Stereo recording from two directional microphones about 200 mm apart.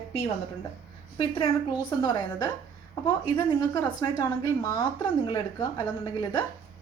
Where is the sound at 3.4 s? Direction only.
20° left (ahead or behind).